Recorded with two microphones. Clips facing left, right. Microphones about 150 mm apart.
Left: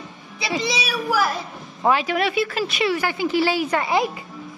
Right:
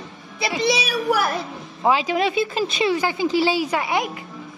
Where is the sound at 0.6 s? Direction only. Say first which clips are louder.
Right 8 dB; 60° right (ahead or behind).